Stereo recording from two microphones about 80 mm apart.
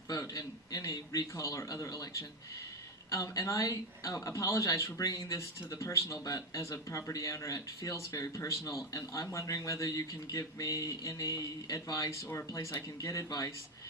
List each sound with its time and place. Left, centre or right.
0.1 s a man's voice: left